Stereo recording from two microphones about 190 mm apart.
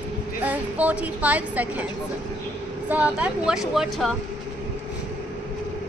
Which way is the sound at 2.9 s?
10° right (ahead or behind).